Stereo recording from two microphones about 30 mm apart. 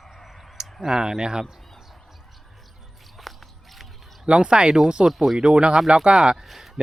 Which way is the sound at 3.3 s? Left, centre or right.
Centre.